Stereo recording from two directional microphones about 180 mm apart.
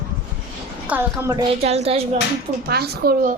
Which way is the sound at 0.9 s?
15° right (ahead or behind).